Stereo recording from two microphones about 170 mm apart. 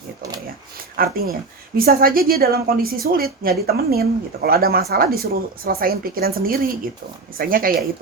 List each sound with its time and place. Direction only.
0.9 s a woman's voice: 60° right (ahead or behind)